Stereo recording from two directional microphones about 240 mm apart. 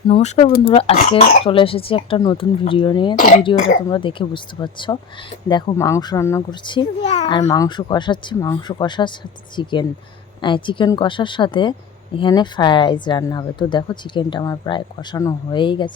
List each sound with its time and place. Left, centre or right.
0.1 s speech: left
3.2 s speech: left
3.8 s speech: centre
7.5 s speech: centre